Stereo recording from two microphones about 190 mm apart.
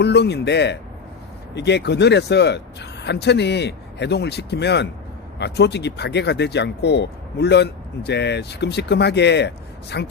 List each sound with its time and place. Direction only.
0.0 s speech: 60° left (ahead or behind)